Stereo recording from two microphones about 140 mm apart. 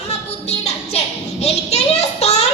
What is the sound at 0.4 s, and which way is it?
Music, 50° left (ahead or behind).